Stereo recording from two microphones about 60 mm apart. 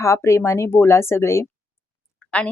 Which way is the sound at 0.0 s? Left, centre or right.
Left.